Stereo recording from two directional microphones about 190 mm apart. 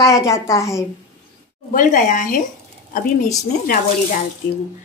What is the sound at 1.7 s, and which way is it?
Speech, 45° left (ahead or behind).